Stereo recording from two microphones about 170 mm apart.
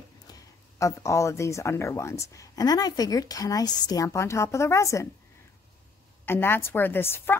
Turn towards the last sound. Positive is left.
turn(degrees=15)  # may be behind; listen again after turning